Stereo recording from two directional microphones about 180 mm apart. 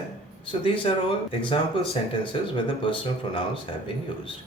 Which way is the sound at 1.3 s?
30° left (ahead or behind).